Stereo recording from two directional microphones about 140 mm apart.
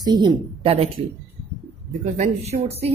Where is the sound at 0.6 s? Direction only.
45° right (ahead or behind).